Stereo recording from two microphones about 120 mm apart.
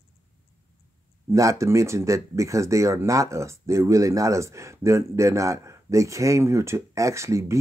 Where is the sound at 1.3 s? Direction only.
25° right (ahead or behind).